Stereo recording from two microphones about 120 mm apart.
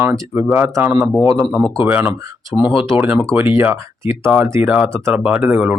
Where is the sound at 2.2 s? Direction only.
30° right (ahead or behind).